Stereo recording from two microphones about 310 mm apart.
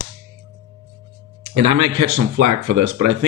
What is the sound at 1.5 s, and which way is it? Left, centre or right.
Speech, right.